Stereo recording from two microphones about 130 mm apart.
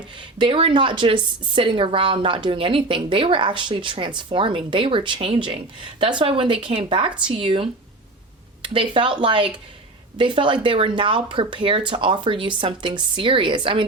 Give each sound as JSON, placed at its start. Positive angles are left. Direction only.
{"t": 0.3, "sound": "a woman's voice", "side_deg": -45}
{"t": 8.7, "sound": "a woman's voice", "side_deg": -40}